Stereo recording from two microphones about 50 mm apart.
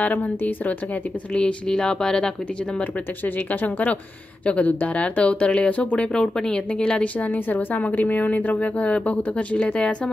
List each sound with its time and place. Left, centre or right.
0.0 s a woman's voice: left
1.3 s speech: centre
3.3 s a woman's voice: left
6.1 s a woman's voice: centre